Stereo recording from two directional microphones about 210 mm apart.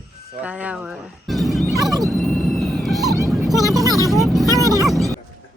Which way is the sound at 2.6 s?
Centre (ahead or behind).